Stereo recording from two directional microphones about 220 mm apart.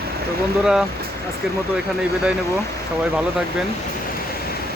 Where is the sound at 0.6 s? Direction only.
5° right (ahead or behind).